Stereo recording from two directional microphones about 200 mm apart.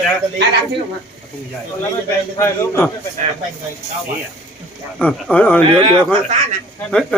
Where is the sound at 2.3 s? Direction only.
15° left (ahead or behind).